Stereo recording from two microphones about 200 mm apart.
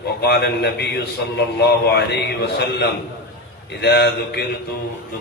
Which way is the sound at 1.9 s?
55° left (ahead or behind).